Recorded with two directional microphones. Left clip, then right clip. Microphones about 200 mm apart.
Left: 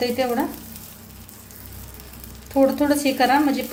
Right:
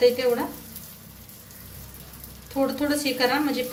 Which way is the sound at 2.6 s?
40° left (ahead or behind).